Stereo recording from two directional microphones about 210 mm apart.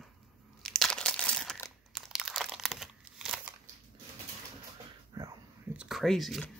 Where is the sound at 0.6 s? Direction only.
Centre (ahead or behind).